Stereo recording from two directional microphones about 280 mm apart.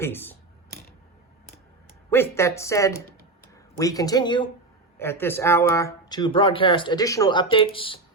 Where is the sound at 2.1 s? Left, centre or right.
Centre.